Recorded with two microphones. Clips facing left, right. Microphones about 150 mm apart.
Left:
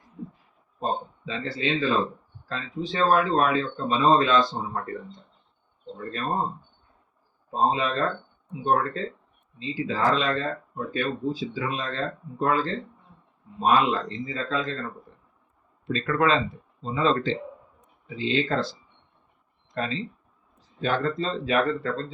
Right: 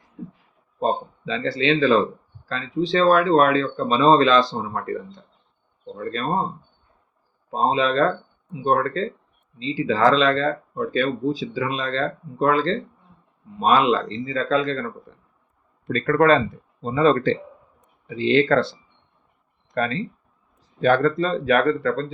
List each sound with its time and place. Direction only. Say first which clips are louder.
0.8 s speech: right 6 dB; 85° right
7.5 s speech: right 4 dB; 90° right
15.9 s speech: right 6 dB; 50° right (ahead or behind)